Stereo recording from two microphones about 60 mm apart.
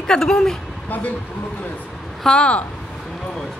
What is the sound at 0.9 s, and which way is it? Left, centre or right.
Speech, left.